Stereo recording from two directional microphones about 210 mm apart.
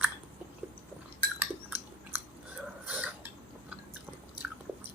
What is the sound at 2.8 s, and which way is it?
Burping, 5° right (ahead or behind).